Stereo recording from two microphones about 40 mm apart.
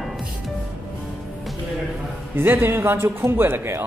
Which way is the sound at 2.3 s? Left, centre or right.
Right.